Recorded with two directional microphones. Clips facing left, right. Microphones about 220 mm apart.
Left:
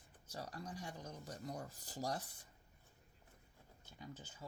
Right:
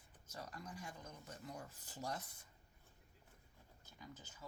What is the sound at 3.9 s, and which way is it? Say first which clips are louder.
Speech: left 4 dB; 30° left (ahead or behind).